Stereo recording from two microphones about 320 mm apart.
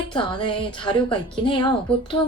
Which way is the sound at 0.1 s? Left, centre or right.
Centre.